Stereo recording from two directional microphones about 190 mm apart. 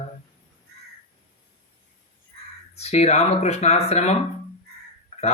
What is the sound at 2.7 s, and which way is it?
Mantra, 35° left (ahead or behind).